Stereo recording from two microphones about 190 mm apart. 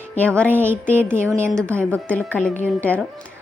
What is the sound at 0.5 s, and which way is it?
Speech, 10° right (ahead or behind).